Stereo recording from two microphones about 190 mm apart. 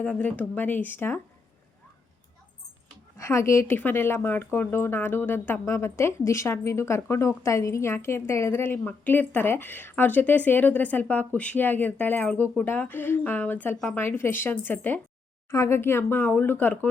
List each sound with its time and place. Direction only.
0.0 s speech: 10° left (ahead or behind)
3.2 s speech: 15° left (ahead or behind)